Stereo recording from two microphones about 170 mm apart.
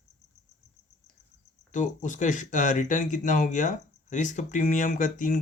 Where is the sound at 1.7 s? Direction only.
45° left (ahead or behind).